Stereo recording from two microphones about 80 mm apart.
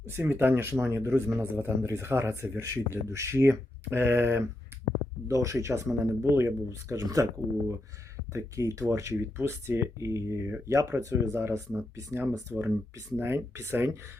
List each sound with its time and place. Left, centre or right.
0.0 s speech: right
5.3 s speech: right